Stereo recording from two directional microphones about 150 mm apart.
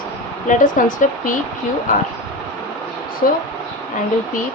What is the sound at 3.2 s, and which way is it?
Speech, 65° left (ahead or behind).